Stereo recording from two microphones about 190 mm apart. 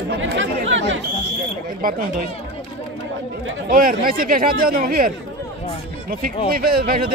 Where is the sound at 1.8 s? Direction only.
50° right (ahead or behind).